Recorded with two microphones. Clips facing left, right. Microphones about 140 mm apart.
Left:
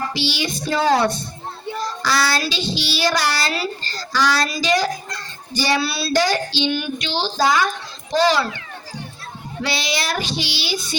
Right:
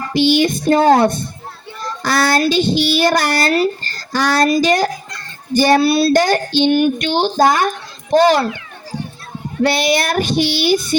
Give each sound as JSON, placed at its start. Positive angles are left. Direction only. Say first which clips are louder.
{"t": 0.1, "sound": "child singing", "louder": "right 11 dB", "side_deg": -50}
{"t": 9.6, "sound": "child singing", "louder": "right 9 dB", "side_deg": -55}